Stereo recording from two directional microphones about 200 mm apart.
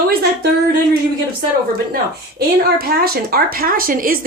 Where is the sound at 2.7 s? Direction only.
50° right (ahead or behind).